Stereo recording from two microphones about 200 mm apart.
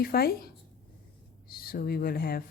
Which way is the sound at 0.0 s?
50° left (ahead or behind).